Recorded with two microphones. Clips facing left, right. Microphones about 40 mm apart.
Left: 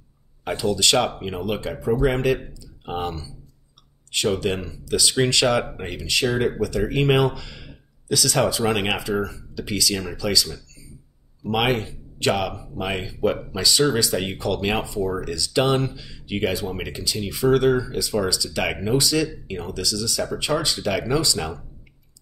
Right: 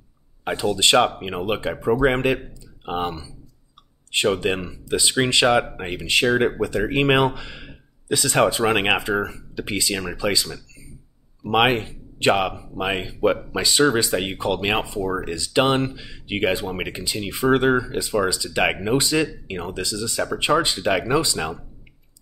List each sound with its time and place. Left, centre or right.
0.5 s speech: right
1.8 s speech: right
2.9 s speech: right
5.9 s speech: right